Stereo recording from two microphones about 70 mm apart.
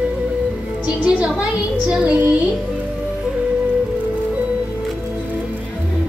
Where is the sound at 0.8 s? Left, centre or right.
Centre.